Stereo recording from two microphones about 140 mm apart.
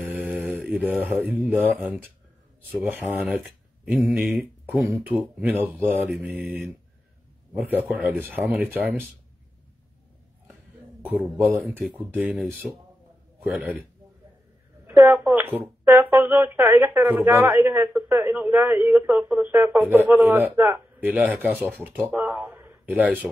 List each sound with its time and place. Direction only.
0.0 s mantra: 10° right (ahead or behind)
1.1 s speech: centre (ahead or behind)
3.2 s a woman's voice: 5° right (ahead or behind)
6.0 s speech: centre (ahead or behind)
7.5 s a woman's voice: 15° right (ahead or behind)
11.9 s a woman's voice: 10° right (ahead or behind)
14.9 s a woman's voice: 15° right (ahead or behind)